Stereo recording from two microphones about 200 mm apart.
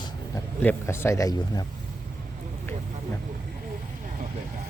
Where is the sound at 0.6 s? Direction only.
10° left (ahead or behind).